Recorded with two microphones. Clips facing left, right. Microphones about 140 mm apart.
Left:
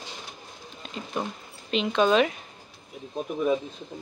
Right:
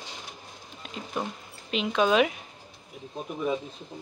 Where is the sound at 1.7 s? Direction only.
5° right (ahead or behind).